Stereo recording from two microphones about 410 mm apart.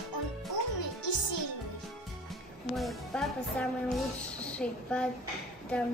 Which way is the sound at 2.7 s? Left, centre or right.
Centre.